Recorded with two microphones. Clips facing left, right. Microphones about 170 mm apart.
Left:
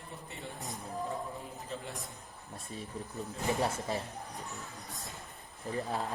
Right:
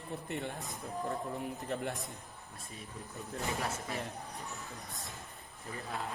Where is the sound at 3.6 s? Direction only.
35° left (ahead or behind).